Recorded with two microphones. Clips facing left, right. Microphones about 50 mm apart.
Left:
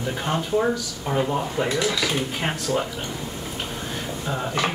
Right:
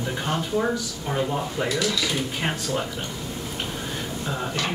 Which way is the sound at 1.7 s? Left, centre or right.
Left.